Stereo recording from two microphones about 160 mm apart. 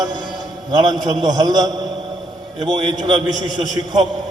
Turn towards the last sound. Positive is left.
turn(degrees=-30)  # may be behind; listen again after turning